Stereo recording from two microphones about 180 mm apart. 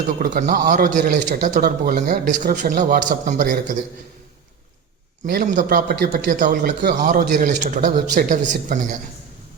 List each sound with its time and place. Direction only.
0.2 s a man's voice: 55° right (ahead or behind)
5.2 s a man's voice: 55° right (ahead or behind)